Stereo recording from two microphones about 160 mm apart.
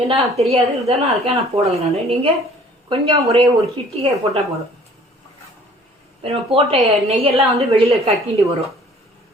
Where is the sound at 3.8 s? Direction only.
35° right (ahead or behind).